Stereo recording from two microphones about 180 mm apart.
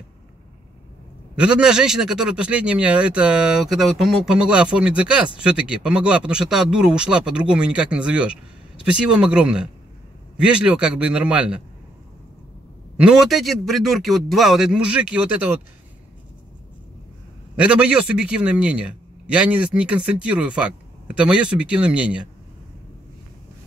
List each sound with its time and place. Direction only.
1.3 s a man's voice: 5° right (ahead or behind)
12.9 s a man's voice: 5° right (ahead or behind)
17.6 s a man's voice: 5° right (ahead or behind)